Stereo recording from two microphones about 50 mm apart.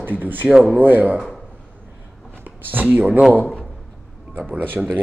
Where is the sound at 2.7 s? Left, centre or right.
Right.